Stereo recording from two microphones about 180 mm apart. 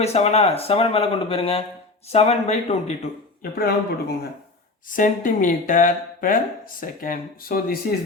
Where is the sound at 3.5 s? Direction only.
55° left (ahead or behind).